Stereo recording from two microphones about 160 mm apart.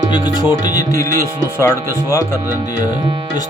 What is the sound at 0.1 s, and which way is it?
Speech, 25° left (ahead or behind).